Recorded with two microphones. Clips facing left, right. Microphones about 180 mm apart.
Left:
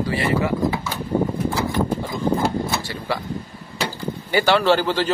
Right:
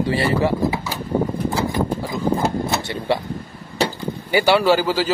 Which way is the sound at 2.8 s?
25° right (ahead or behind).